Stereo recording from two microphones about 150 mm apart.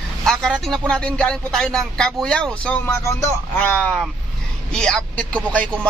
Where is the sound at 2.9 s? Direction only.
20° left (ahead or behind).